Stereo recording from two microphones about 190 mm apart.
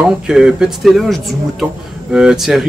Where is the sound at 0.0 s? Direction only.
5° right (ahead or behind).